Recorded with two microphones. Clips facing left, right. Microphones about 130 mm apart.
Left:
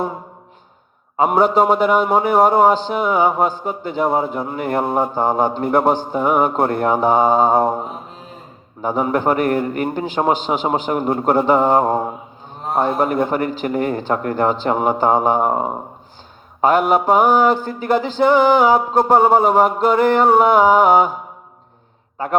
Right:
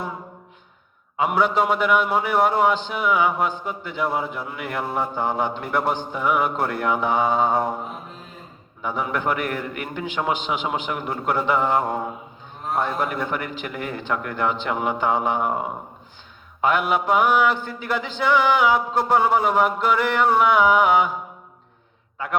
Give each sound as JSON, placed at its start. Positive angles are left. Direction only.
{"t": 1.1, "sound": "a man's voice", "side_deg": 40}